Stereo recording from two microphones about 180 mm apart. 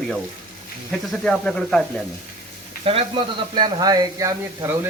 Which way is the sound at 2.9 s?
30° right (ahead or behind).